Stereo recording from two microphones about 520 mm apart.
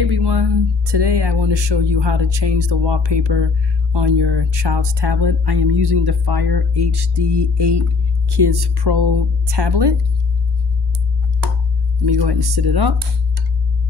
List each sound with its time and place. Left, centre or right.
0.0 s speech: right
12.0 s speech: right